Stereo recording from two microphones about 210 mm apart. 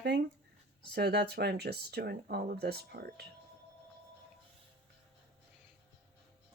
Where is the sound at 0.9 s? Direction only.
50° right (ahead or behind).